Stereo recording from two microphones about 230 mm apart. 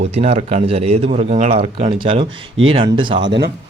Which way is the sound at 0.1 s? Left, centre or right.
Right.